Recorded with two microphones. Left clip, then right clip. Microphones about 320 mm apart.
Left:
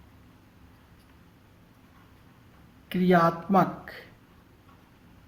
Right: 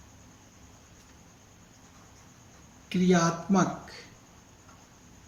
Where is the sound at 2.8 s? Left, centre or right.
Left.